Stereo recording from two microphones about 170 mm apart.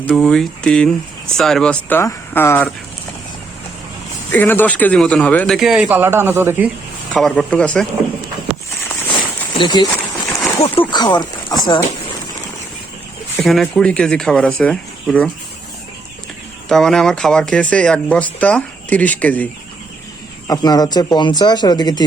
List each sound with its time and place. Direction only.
0.1 s speech: centre (ahead or behind)
4.3 s a man's voice: 10° left (ahead or behind); by 6.7 s 15° right (ahead or behind)
7.1 s speech: 5° left (ahead or behind)
8.9 s a sound: 25° left (ahead or behind)
10.9 s speech: 25° left (ahead or behind)
13.3 s speech: centre (ahead or behind)
16.6 s speech: centre (ahead or behind)
20.5 s speech: 25° left (ahead or behind)